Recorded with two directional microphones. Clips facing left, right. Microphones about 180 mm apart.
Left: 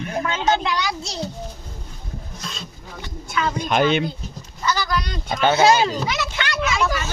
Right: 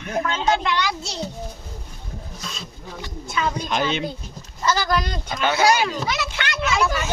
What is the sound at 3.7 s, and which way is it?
Speech, 60° left (ahead or behind).